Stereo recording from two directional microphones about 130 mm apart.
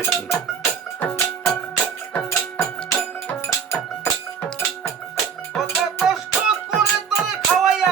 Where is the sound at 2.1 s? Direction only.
20° left (ahead or behind).